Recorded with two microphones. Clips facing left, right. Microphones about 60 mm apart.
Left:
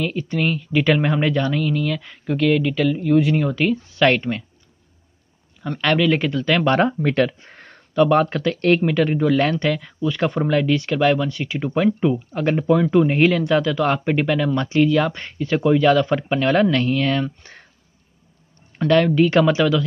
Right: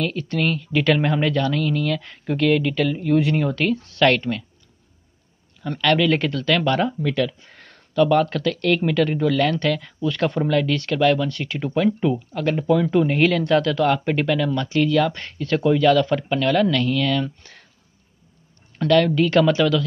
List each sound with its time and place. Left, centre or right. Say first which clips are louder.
0.0 s speech: left 1 dB; centre
5.6 s speech: even; centre
6.9 s speech: left 3 dB; left
7.5 s speech: left 1 dB; left
8.8 s speech: left 1 dB; centre
19.0 s speech: left 1 dB; centre